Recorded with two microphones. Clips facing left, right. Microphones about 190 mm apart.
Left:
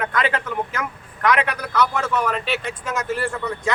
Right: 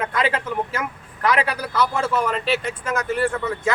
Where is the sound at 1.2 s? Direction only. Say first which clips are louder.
Even; 30° right (ahead or behind).